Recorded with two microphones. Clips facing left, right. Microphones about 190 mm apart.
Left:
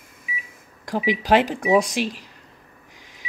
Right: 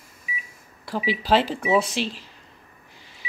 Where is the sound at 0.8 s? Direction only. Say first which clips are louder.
Left 3 dB; 15° left (ahead or behind).